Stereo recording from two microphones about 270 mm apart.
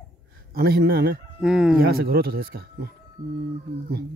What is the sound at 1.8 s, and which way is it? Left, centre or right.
Speech, right.